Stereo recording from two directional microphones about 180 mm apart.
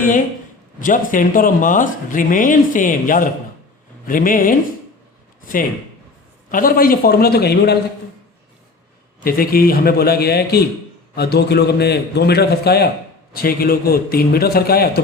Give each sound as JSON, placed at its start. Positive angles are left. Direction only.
{"t": 0.8, "sound": "speech", "side_deg": 50}
{"t": 6.5, "sound": "a man's voice", "side_deg": 50}
{"t": 9.2, "sound": "a man's voice", "side_deg": 55}